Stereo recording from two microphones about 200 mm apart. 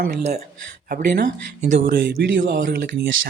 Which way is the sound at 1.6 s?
40° right (ahead or behind).